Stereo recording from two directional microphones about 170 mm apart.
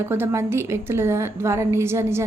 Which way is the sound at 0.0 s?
15° right (ahead or behind).